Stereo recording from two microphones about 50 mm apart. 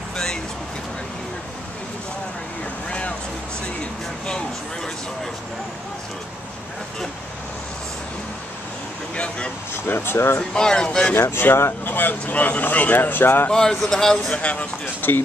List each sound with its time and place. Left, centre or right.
2.9 s vehicle: left
9.1 s speech: left
9.8 s speech: left
10.5 s speech: centre
11.1 s speech: left
11.8 s speech: left
13.5 s speech: centre
14.3 s speech: left
15.0 s speech: left